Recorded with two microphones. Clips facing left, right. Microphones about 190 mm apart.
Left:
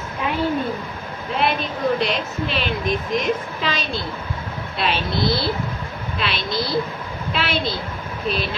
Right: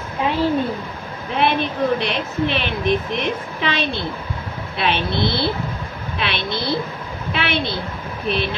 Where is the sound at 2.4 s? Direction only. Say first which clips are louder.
Right 4 dB; 60° right (ahead or behind).